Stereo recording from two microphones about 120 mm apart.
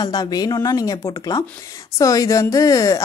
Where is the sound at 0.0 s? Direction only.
35° left (ahead or behind).